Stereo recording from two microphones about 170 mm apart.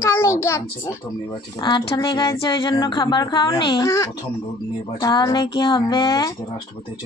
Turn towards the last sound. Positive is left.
turn(degrees=25)  # may be behind; listen again after turning